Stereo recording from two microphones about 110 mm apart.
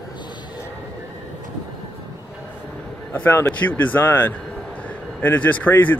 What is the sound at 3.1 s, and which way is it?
A man's voice, 20° left (ahead or behind).